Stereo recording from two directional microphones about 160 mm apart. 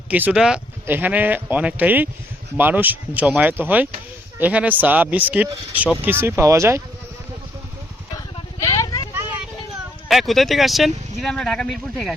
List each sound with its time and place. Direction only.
0.1 s speech: 10° right (ahead or behind)
8.6 s vehicle: 20° left (ahead or behind)
10.1 s speech: centre (ahead or behind)